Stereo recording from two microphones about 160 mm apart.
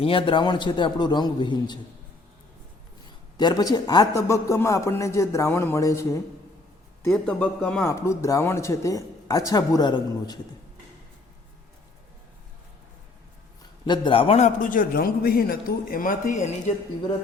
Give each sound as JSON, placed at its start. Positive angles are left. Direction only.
{"t": 0.0, "sound": "a man's voice", "side_deg": 35}
{"t": 3.3, "sound": "a man's voice", "side_deg": 25}
{"t": 7.1, "sound": "speech", "side_deg": 5}
{"t": 7.9, "sound": "a man's voice", "side_deg": 15}
{"t": 13.8, "sound": "a man's voice", "side_deg": 30}